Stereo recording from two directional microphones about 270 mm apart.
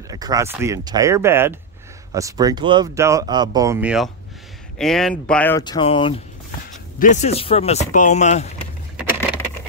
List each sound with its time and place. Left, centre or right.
0.1 s speech: centre; by 8.5 s left